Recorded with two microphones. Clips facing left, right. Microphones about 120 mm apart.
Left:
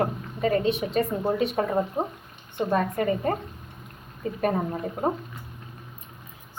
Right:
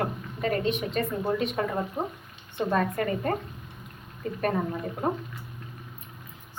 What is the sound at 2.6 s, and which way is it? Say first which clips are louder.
Speech: left 2 dB; 15° left (ahead or behind).